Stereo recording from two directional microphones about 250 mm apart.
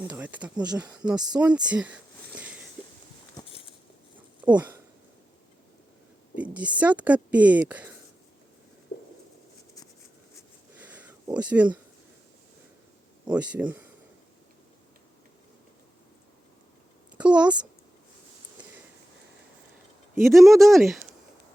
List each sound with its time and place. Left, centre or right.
0.0 s a woman's voice: centre
1.3 s a sound: centre
3.4 s a sound: centre
4.4 s speech: centre
6.3 s a woman's voice: centre
10.8 s a sound: centre
13.3 s a woman's voice: centre
17.2 s a woman's voice: centre
20.2 s a woman's voice: centre